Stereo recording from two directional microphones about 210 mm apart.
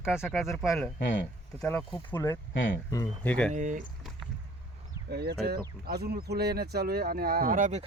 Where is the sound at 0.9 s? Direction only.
55° left (ahead or behind).